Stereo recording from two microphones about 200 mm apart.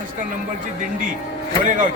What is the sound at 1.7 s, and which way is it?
Speech, 40° right (ahead or behind).